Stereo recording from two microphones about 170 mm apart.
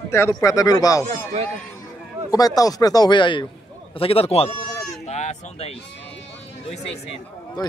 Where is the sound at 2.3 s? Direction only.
20° left (ahead or behind); by 4.5 s 35° left (ahead or behind).